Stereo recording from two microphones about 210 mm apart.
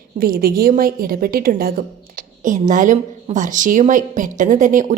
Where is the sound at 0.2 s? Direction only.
45° right (ahead or behind).